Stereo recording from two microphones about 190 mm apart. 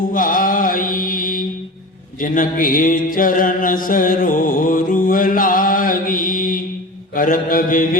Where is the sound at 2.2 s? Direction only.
45° left (ahead or behind).